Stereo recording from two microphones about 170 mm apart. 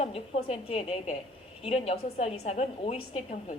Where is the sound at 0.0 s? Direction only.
35° left (ahead or behind).